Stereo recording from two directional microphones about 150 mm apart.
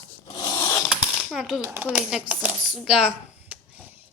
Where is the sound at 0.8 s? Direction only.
5° right (ahead or behind).